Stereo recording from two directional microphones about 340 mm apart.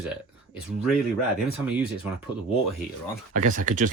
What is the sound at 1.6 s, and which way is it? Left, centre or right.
Speech, centre.